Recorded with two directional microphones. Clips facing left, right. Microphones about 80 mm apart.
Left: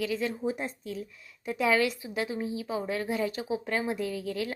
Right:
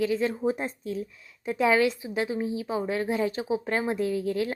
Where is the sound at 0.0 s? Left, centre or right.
Right.